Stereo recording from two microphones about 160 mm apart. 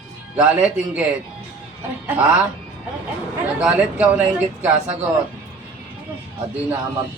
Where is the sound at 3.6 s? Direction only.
5° right (ahead or behind).